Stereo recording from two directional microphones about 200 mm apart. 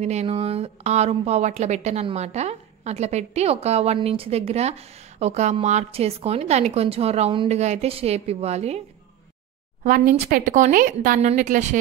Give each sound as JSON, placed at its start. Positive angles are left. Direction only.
{"t": 0.0, "sound": "a woman's voice", "side_deg": -35}
{"t": 9.8, "sound": "a woman's voice", "side_deg": -45}